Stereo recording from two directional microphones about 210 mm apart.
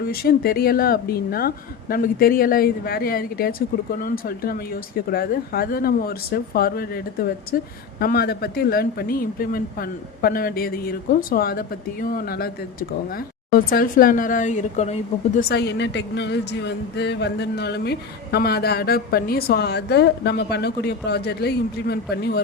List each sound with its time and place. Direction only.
0.0 s a woman's voice: 45° left (ahead or behind)
13.7 s speech: 45° left (ahead or behind)
15.4 s a woman's voice: 50° left (ahead or behind)